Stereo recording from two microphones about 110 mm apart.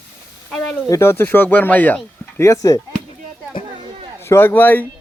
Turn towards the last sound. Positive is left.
turn(degrees=20)  # may be behind; listen again after turning